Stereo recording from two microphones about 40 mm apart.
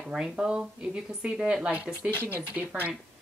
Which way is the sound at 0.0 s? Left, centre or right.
Centre.